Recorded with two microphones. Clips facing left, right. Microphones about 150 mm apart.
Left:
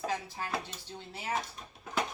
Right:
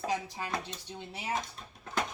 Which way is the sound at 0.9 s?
15° right (ahead or behind).